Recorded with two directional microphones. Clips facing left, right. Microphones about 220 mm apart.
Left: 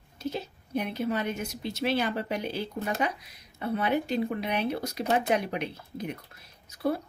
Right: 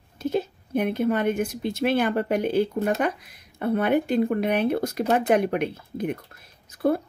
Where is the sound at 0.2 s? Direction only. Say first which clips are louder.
Right 8 dB; 55° right (ahead or behind).